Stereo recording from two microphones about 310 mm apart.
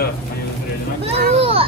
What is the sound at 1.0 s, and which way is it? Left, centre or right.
Children playing, centre.